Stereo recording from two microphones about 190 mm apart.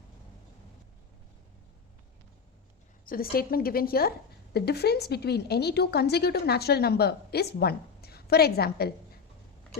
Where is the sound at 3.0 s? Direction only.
50° left (ahead or behind).